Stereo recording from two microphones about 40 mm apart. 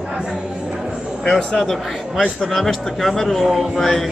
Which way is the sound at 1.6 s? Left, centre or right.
Centre.